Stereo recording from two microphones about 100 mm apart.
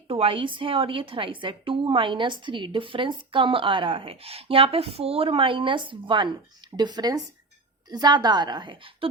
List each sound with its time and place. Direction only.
0.1 s a woman's voice: 65° right (ahead or behind)
6.7 s a woman's voice: 45° right (ahead or behind); by 9.0 s 60° right (ahead or behind)